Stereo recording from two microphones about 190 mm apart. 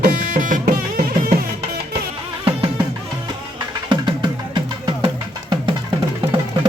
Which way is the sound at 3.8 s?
25° right (ahead or behind).